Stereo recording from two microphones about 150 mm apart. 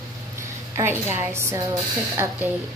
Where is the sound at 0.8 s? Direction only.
15° right (ahead or behind).